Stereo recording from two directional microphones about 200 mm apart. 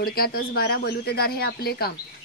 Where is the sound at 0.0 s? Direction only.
50° left (ahead or behind).